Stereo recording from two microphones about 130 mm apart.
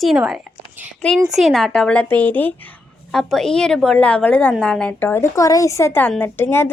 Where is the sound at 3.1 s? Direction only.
5° left (ahead or behind).